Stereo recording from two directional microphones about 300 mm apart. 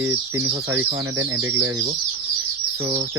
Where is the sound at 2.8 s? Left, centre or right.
Centre.